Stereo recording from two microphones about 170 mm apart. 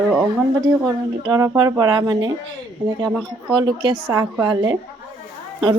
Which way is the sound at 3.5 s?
25° right (ahead or behind).